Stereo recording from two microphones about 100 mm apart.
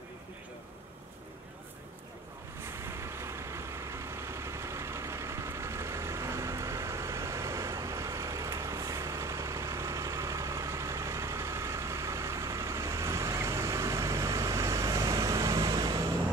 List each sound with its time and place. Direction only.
2.6 s vehicle: 25° right (ahead or behind); by 16.0 s 45° right (ahead or behind)